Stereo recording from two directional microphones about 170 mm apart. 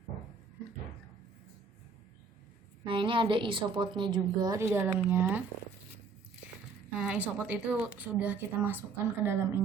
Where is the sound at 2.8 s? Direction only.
30° right (ahead or behind).